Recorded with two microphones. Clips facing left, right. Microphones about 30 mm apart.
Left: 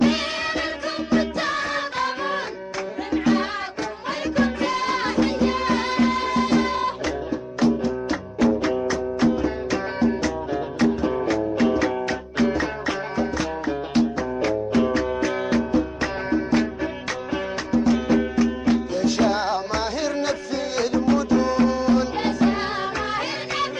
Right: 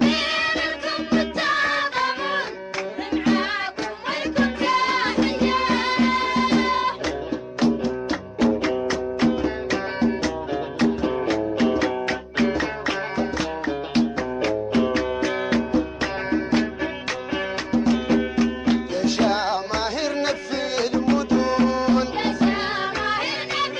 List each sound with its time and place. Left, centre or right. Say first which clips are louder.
0.0 s music: right 1 dB; right
8.8 s music: even; right
9.4 s music: even; centre
15.7 s music: even; centre
17.7 s music: left 1 dB; centre